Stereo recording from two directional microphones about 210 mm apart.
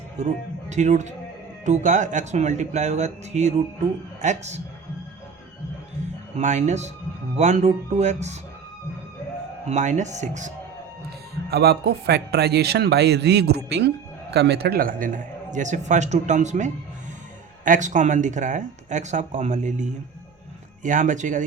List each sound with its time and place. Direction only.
0.2 s speech: 35° right (ahead or behind)
6.3 s speech: 35° right (ahead or behind)
9.6 s speech: 35° right (ahead or behind)
11.5 s a man's voice: 50° right (ahead or behind)